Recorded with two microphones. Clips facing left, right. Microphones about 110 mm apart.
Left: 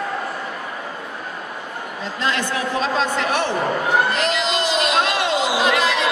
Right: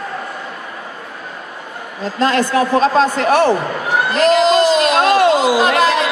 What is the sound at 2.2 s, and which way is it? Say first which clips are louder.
A man's voice: right 9 dB; 45° right (ahead or behind).